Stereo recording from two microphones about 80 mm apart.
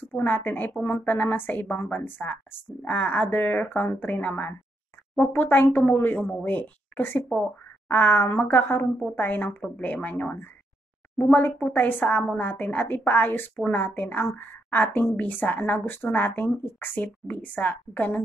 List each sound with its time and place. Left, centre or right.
0.1 s speech: left